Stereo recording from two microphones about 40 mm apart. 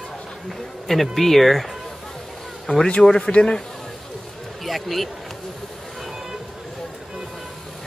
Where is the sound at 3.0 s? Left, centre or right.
Centre.